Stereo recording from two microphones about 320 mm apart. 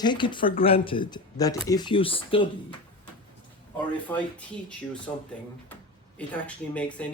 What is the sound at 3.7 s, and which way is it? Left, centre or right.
Speech, centre.